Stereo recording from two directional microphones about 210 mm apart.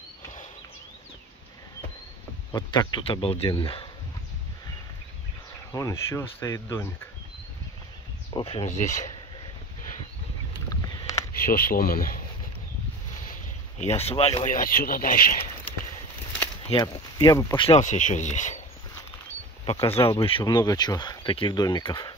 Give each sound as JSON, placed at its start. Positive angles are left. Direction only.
{"t": 2.5, "sound": "speech", "side_deg": 20}
{"t": 5.7, "sound": "speech", "side_deg": 15}
{"t": 8.3, "sound": "speech", "side_deg": 25}
{"t": 10.7, "sound": "a sound", "side_deg": 15}
{"t": 11.3, "sound": "speech", "side_deg": 45}
{"t": 13.2, "sound": "speech", "side_deg": 35}
{"t": 16.6, "sound": "speech", "side_deg": 20}
{"t": 17.6, "sound": "speech", "side_deg": 35}
{"t": 19.6, "sound": "speech", "side_deg": 20}